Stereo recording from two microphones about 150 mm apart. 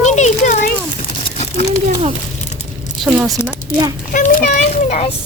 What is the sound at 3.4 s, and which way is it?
Speech, 25° right (ahead or behind).